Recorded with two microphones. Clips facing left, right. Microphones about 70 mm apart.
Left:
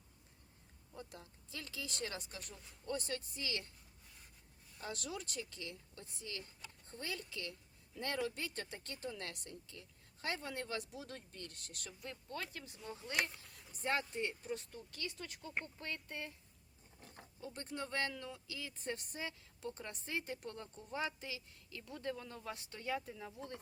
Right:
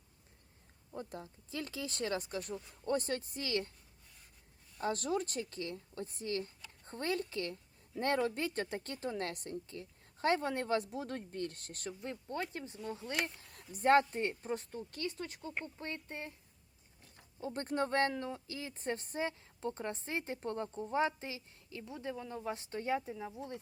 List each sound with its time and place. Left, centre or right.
0.9 s a woman's voice: right
4.8 s a woman's voice: right
12.3 s speech: right
13.2 s a sound: right
13.8 s a woman's voice: right
17.0 s wild animals: left
17.4 s a woman's voice: right
21.9 s speech: centre